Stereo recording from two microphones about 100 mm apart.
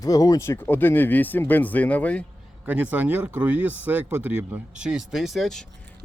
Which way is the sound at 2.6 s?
15° right (ahead or behind).